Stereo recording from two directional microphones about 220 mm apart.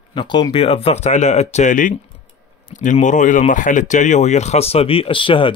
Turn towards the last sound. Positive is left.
turn(degrees=25)  # may be behind; listen again after turning